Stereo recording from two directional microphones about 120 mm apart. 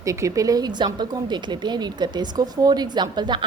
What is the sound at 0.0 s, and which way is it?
A woman's voice, 25° right (ahead or behind).